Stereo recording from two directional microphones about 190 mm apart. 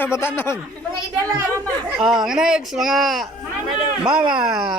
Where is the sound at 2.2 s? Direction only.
5° right (ahead or behind).